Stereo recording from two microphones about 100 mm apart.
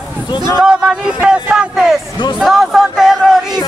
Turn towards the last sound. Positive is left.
turn(degrees=0)  # may be behind; listen again after turning